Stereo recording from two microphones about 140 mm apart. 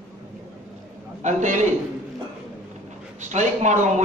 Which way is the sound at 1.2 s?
60° right (ahead or behind).